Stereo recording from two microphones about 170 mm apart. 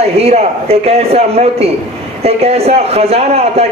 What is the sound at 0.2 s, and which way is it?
A man's voice, 35° right (ahead or behind).